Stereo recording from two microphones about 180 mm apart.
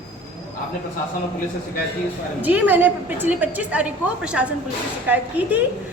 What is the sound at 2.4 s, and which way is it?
A woman's voice, 10° right (ahead or behind).